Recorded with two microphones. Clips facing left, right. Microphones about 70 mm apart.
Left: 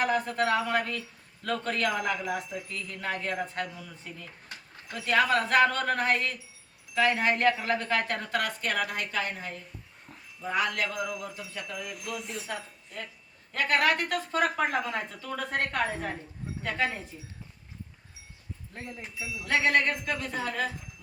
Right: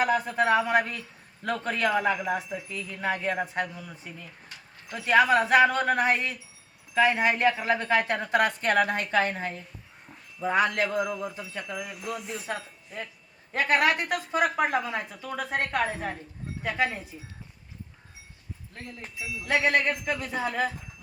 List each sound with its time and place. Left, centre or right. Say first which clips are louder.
0.0 s a woman's voice: right 3 dB; centre
11.9 s speech: right 2 dB; centre
13.5 s speech: right 2 dB; centre
18.7 s speech: left 1 dB; centre
19.6 s speech: even; centre